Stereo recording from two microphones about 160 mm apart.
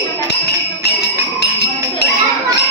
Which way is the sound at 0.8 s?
90° left.